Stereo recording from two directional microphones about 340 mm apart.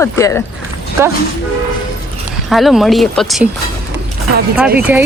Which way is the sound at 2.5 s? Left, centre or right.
Centre.